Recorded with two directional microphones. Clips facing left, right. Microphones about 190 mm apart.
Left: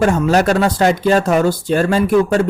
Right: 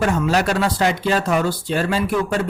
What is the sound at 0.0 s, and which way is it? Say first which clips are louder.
Speech: left 5 dB; 45° left (ahead or behind).